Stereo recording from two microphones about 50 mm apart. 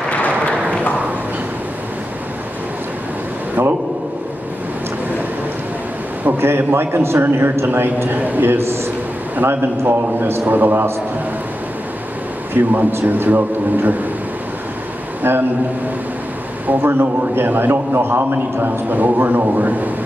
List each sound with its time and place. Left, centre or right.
0.1 s a sound: left
3.6 s a man's voice: right
6.2 s a man's voice: right
8.2 s a man's voice: right
8.5 s a man's voice: right
10.4 s a man's voice: right
12.6 s a man's voice: right
13.0 s a man's voice: right
15.2 s a man's voice: right
16.6 s a man's voice: right